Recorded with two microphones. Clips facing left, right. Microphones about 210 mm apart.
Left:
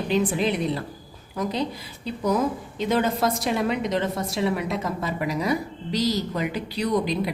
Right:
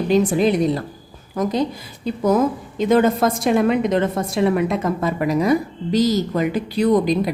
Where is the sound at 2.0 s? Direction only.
50° right (ahead or behind).